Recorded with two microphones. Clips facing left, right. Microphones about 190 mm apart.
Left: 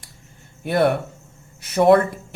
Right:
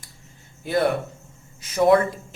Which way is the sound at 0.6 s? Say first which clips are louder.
Left 3 dB; 60° left (ahead or behind).